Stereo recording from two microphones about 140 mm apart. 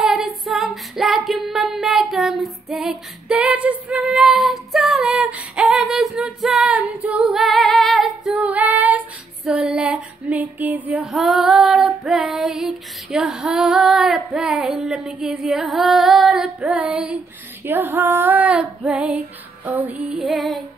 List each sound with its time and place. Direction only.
0.0 s female singing: 5° right (ahead or behind)
9.4 s a sound: 5° right (ahead or behind)
17.6 s female singing: 15° right (ahead or behind)